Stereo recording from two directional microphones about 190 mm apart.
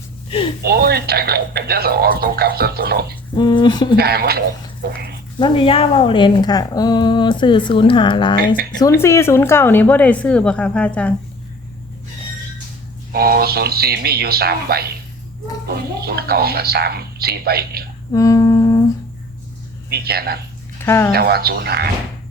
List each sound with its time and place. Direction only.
0.3 s speech: 30° left (ahead or behind)
0.6 s speech: 55° right (ahead or behind)
3.3 s speech: 25° left (ahead or behind)
3.9 s speech: 55° right (ahead or behind)
5.4 s speech: 25° left (ahead or behind)
8.8 s a woman's voice: 15° left (ahead or behind)
13.1 s speech: 55° right (ahead or behind)
18.1 s humming: 20° left (ahead or behind)
19.9 s speech: 55° right (ahead or behind)
20.7 s speech: 15° left (ahead or behind)
21.1 s speech: 55° right (ahead or behind)